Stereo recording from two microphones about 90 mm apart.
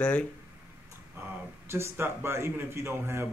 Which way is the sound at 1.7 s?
30° right (ahead or behind).